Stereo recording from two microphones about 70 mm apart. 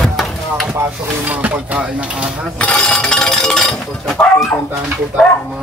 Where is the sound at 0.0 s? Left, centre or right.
Centre.